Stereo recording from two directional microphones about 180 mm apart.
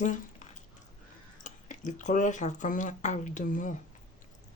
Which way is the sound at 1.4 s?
45° left (ahead or behind).